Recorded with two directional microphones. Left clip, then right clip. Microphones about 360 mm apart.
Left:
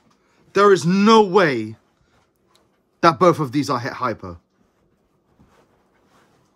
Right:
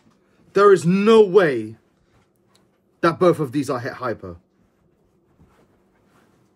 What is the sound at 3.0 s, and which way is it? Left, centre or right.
Speech, centre.